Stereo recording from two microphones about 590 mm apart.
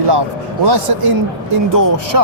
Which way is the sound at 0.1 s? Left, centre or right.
Right.